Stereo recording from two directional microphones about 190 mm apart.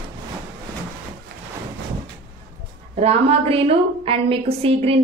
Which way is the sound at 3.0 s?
30° right (ahead or behind).